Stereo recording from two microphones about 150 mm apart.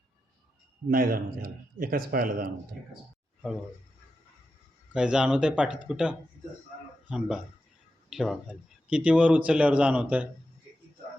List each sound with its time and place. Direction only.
0.9 s a man's voice: 70° right (ahead or behind)
4.9 s speech: 5° right (ahead or behind)